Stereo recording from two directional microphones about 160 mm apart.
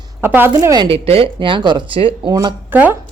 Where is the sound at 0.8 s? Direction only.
35° right (ahead or behind).